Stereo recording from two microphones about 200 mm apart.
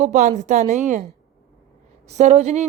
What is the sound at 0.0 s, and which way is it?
Speech, 35° right (ahead or behind).